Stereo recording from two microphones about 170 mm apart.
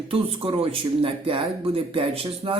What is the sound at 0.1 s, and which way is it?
Speech, 35° right (ahead or behind).